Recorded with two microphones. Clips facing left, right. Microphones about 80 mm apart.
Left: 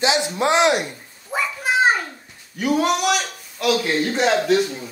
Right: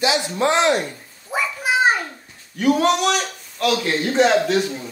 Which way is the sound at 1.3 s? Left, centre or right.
Centre.